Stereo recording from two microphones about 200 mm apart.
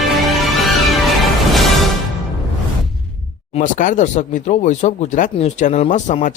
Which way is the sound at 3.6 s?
40° left (ahead or behind).